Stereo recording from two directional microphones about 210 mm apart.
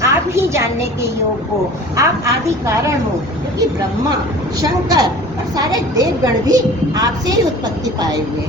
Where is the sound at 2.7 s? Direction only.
15° right (ahead or behind).